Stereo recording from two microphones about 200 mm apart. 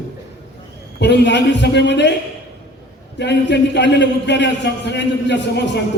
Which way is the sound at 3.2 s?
60° left (ahead or behind).